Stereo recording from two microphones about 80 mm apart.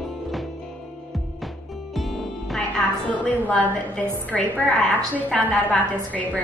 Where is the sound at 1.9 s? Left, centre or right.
Centre.